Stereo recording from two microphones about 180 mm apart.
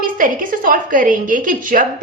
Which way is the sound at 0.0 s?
50° right (ahead or behind).